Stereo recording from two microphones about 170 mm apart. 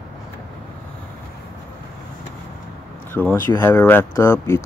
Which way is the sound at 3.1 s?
10° left (ahead or behind).